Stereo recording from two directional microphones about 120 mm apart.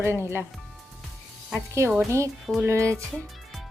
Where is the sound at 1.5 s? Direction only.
25° right (ahead or behind).